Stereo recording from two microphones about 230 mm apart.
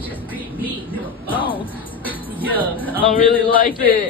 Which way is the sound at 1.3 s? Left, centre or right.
Left.